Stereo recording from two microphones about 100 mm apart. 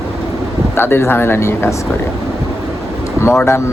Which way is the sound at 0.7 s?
25° left (ahead or behind).